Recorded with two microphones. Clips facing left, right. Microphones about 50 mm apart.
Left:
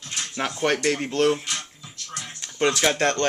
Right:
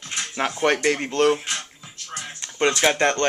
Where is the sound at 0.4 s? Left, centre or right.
Right; by 1.4 s centre.